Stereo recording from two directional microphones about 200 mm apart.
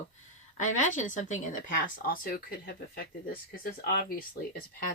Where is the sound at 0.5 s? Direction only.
40° left (ahead or behind).